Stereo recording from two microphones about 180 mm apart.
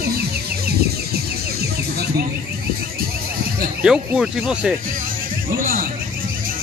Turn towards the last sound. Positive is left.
turn(degrees=-50)  # may be behind; listen again after turning